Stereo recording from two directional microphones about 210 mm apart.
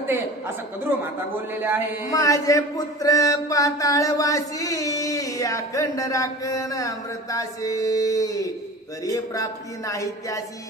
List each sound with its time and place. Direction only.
0.0 s a woman's voice: 10° right (ahead or behind)
1.5 s a sound: 10° right (ahead or behind)
2.0 s a man's voice: 15° left (ahead or behind)